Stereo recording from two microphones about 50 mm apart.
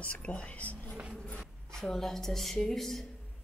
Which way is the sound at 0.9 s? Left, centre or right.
Right.